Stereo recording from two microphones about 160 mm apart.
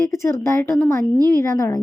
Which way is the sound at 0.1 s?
15° left (ahead or behind).